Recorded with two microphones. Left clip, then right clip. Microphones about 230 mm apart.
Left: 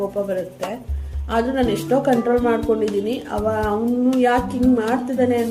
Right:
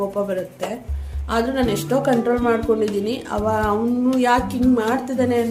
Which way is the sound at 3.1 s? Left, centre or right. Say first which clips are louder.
Even; centre.